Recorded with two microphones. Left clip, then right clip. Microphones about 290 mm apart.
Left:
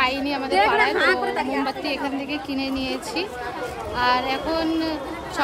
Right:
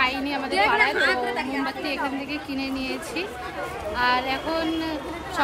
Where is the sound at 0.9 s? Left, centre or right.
Left.